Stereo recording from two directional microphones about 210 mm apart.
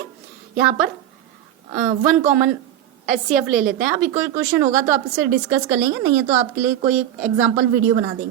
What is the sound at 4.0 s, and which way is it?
Speech, 10° right (ahead or behind).